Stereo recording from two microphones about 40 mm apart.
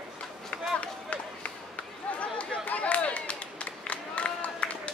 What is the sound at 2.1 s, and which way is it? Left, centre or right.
Chatter, left.